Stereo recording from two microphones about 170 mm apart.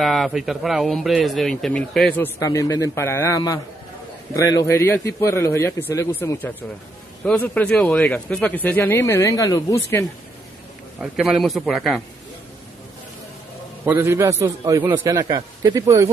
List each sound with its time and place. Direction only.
0.0 s a man's voice: centre (ahead or behind); by 10.0 s 20° left (ahead or behind)
11.0 s a man's voice: centre (ahead or behind)
13.8 s a man's voice: 15° right (ahead or behind)